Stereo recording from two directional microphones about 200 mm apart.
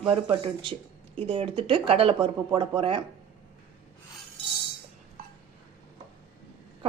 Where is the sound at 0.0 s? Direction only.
25° right (ahead or behind).